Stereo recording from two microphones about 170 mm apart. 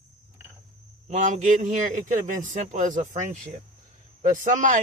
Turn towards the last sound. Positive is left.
turn(degrees=-50)  # may be behind; listen again after turning